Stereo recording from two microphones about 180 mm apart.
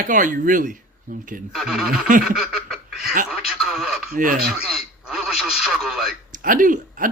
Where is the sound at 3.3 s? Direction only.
Centre (ahead or behind).